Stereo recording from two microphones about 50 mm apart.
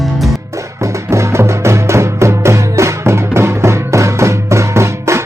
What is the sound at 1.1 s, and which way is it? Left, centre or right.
Music, right.